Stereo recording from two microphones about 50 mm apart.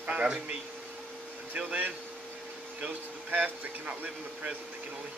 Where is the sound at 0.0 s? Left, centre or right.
Right.